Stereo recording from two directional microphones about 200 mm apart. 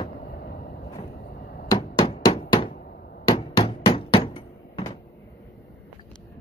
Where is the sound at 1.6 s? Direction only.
25° left (ahead or behind).